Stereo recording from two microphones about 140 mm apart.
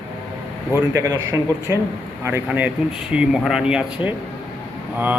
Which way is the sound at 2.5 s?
10° right (ahead or behind).